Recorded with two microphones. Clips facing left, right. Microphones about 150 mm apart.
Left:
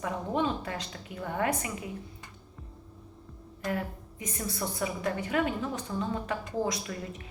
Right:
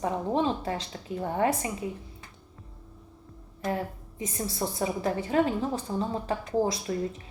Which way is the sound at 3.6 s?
30° right (ahead or behind).